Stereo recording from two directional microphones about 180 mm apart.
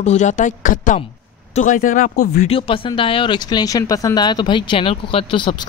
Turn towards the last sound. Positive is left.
turn(degrees=30)  # may be behind; listen again after turning